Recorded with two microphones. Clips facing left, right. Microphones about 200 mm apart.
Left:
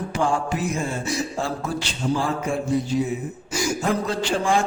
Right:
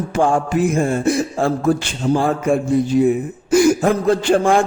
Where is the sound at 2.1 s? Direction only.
55° right (ahead or behind).